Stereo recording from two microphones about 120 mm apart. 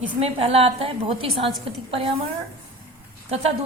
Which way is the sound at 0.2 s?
55° right (ahead or behind).